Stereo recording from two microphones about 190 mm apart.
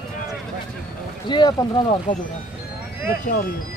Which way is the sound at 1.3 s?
25° left (ahead or behind).